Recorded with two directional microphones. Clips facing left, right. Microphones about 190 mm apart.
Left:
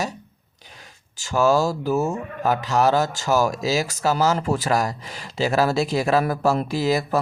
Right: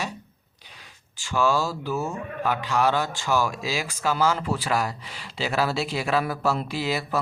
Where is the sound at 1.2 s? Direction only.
45° left (ahead or behind).